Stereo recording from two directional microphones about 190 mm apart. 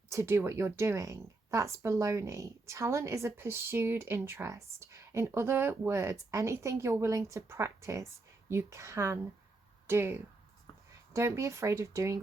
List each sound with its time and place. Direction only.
0.1 s a woman's voice: 15° right (ahead or behind)